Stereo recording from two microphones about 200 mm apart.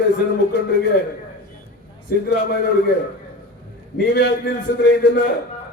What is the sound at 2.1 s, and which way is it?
Speech, 60° left (ahead or behind).